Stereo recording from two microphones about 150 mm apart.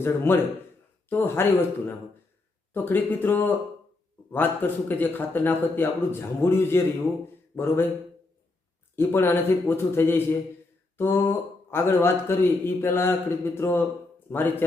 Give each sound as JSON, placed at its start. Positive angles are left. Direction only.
{"t": 0.0, "sound": "speech", "side_deg": 15}
{"t": 2.7, "sound": "speech", "side_deg": 15}
{"t": 9.0, "sound": "speech", "side_deg": 15}